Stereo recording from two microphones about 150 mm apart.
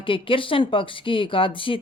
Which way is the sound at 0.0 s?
35° left (ahead or behind).